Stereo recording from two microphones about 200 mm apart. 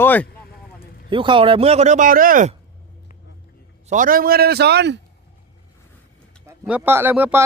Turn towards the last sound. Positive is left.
turn(degrees=-10)  # may be behind; listen again after turning